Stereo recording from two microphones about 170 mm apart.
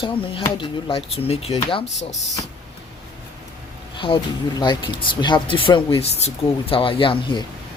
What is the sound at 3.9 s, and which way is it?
Speech, 30° left (ahead or behind).